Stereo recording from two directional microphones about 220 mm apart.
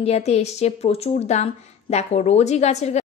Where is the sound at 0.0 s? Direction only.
30° left (ahead or behind).